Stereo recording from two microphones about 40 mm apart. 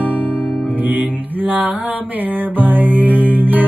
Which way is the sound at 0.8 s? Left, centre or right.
Right.